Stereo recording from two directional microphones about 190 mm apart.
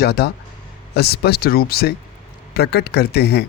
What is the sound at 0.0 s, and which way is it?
Speech, 60° left (ahead or behind).